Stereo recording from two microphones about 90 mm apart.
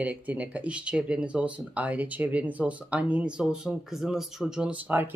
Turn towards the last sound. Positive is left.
turn(degrees=-20)  # may be behind; listen again after turning